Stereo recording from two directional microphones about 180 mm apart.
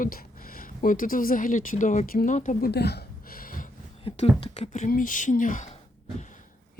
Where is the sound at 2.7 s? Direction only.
65° left (ahead or behind).